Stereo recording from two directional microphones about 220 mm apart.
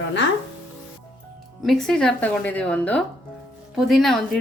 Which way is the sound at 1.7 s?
5° left (ahead or behind).